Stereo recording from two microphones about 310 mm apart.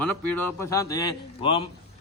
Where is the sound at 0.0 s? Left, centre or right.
Centre.